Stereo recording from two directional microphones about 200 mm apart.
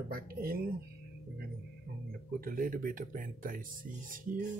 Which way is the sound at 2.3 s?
45° right (ahead or behind).